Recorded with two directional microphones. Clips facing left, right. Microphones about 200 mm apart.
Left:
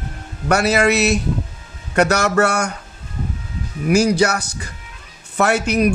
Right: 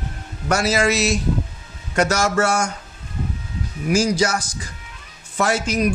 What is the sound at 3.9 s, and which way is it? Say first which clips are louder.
A man's voice: left 3 dB; 60° left (ahead or behind).